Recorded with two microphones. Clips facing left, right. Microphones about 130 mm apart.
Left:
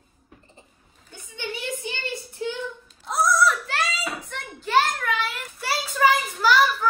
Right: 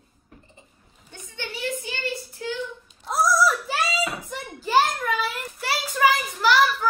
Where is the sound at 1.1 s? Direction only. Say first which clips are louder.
Left 2 dB; 15° left (ahead or behind).